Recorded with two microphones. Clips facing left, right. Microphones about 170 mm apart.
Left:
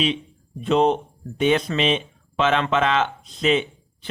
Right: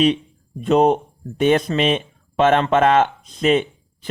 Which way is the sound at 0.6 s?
45° right (ahead or behind).